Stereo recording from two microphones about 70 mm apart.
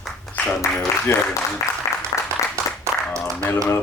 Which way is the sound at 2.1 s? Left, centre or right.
Left.